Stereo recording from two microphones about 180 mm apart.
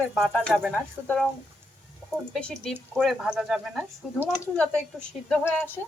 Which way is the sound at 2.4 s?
5° left (ahead or behind).